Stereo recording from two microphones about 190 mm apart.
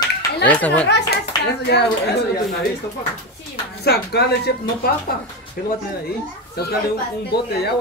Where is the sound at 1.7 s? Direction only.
60° left (ahead or behind).